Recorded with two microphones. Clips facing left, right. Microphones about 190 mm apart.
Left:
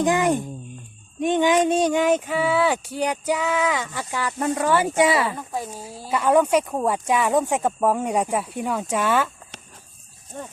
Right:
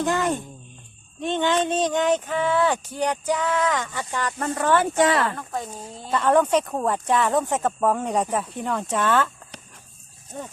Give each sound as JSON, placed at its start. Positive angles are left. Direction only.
{"t": 0.0, "sound": "speech", "side_deg": 15}